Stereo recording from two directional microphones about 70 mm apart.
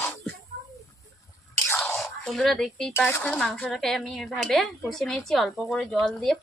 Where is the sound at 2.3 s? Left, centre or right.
Centre.